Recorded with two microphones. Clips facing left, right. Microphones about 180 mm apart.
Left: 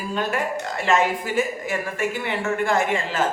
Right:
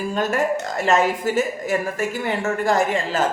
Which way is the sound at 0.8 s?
40° right (ahead or behind).